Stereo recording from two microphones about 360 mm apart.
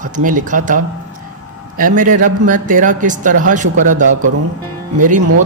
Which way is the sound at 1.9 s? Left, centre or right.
Right.